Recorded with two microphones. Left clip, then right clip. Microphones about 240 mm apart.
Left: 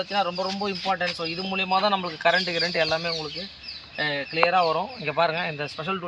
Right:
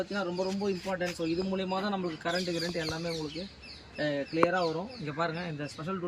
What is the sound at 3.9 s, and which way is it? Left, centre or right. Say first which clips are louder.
Speech: left 5 dB; centre.